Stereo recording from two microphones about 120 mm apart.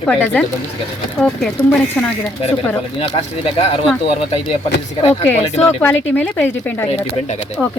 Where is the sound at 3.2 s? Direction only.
55° left (ahead or behind).